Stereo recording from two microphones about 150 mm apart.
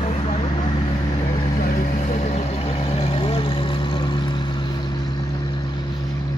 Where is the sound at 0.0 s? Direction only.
35° left (ahead or behind).